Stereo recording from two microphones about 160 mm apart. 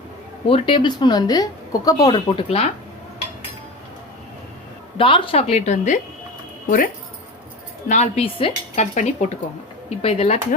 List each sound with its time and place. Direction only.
0.4 s speech: 35° left (ahead or behind)
4.9 s a woman's voice: 35° left (ahead or behind)
6.7 s speech: 60° left (ahead or behind)
7.9 s a woman's voice: 45° left (ahead or behind)